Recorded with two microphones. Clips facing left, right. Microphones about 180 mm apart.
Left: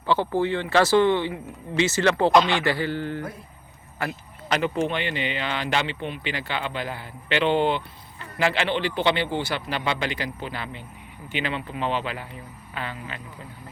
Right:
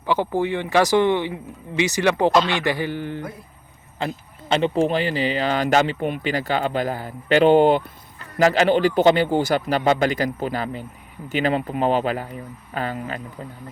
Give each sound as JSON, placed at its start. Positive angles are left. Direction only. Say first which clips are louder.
{"t": 0.0, "sound": "speech", "louder": "right 1 dB", "side_deg": -15}
{"t": 4.0, "sound": "speech", "louder": "right 3 dB", "side_deg": -25}